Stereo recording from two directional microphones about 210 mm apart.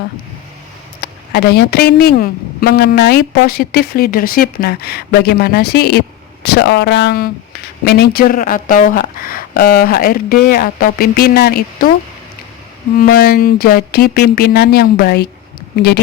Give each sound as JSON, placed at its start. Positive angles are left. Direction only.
{"t": 1.0, "sound": "speech", "side_deg": 50}
{"t": 13.0, "sound": "speech", "side_deg": 45}